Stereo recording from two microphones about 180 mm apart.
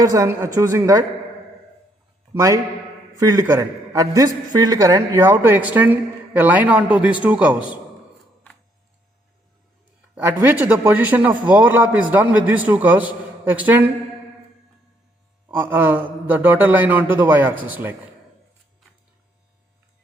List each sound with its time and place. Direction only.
0.0 s a man's voice: 20° right (ahead or behind)
2.3 s a man's voice: 20° right (ahead or behind)
10.2 s a man's voice: 10° right (ahead or behind)
15.4 s a man's voice: 10° right (ahead or behind)